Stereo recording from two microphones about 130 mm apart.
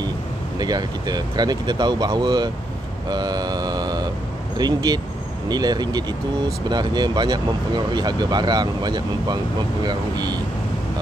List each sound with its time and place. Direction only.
0.6 s speech: 30° right (ahead or behind)